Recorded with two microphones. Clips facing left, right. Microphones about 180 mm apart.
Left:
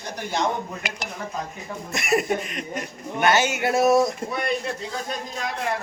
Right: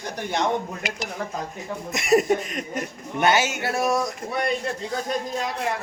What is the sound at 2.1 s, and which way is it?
Speech, 40° right (ahead or behind).